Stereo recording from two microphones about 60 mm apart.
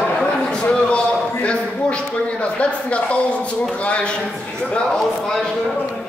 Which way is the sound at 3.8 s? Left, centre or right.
Centre.